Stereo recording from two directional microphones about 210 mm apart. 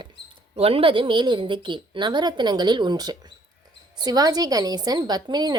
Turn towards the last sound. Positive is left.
turn(degrees=-20)  # may be behind; listen again after turning